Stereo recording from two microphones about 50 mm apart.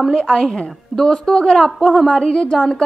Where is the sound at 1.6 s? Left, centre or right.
Centre.